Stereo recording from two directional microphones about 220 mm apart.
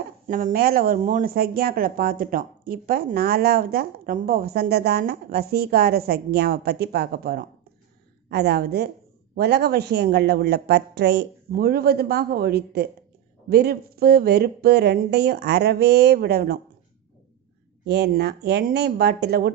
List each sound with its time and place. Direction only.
0.3 s speech: 40° right (ahead or behind)
17.8 s speech: 50° right (ahead or behind)